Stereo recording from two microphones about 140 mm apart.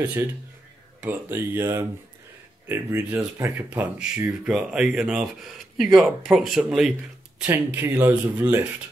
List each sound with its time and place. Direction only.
0.0 s speech: 10° right (ahead or behind)
7.4 s speech: 15° right (ahead or behind)